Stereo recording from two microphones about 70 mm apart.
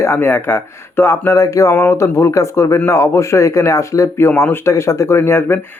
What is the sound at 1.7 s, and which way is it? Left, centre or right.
A man's voice, left.